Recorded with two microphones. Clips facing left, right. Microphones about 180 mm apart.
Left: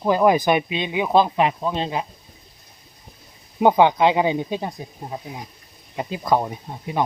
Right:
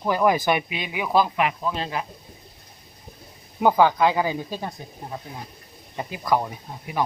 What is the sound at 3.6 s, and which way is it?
Speech, 20° left (ahead or behind).